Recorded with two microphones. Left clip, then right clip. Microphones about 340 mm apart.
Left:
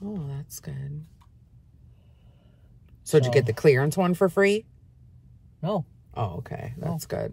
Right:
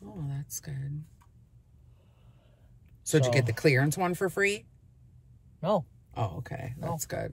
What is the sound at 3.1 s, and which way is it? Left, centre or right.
Speech, centre.